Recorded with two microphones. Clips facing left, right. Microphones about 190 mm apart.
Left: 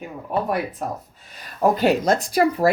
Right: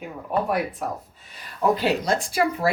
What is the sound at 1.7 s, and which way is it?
Speech, 45° left (ahead or behind).